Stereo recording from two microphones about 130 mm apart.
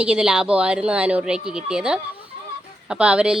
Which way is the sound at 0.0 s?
5° right (ahead or behind).